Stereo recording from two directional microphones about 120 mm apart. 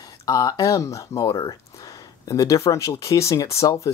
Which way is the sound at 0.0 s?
30° left (ahead or behind).